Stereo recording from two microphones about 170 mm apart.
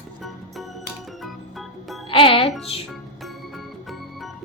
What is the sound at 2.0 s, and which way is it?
Music, 30° left (ahead or behind).